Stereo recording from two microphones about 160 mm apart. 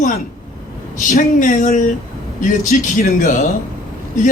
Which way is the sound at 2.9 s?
55° left (ahead or behind).